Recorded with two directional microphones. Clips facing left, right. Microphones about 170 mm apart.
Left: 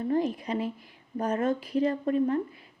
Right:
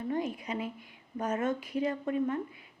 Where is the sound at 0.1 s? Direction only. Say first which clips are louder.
Left 6 dB; 35° left (ahead or behind).